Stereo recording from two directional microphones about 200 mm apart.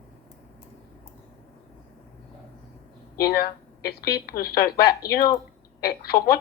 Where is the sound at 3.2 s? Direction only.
50° left (ahead or behind).